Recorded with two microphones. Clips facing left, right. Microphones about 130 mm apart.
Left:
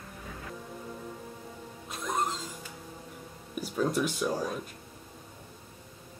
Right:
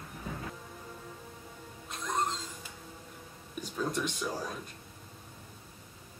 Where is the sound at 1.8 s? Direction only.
5° left (ahead or behind).